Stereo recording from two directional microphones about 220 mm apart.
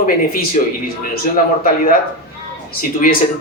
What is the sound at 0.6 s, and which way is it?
Speech, 35° left (ahead or behind).